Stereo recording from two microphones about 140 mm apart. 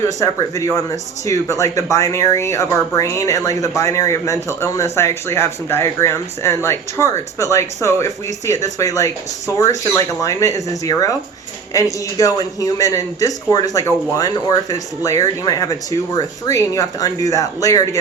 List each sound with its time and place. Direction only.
0.2 s speech: 25° left (ahead or behind)